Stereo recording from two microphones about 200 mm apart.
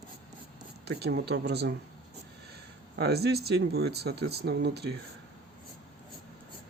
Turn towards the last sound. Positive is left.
turn(degrees=-55)  # may be behind; listen again after turning